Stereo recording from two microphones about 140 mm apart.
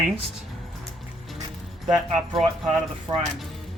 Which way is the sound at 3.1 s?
35° right (ahead or behind).